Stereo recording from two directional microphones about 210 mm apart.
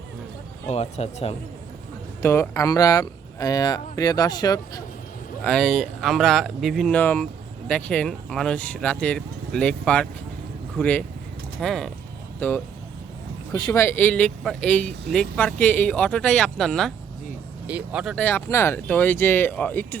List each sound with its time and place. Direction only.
0.7 s speech: 30° left (ahead or behind)
2.2 s speech: 10° left (ahead or behind)
5.4 s speech: 5° left (ahead or behind)